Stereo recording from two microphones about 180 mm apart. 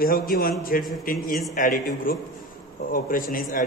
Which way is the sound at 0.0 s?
55° left (ahead or behind).